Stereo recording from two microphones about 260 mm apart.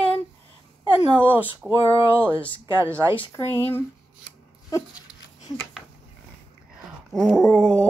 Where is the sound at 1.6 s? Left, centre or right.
Centre.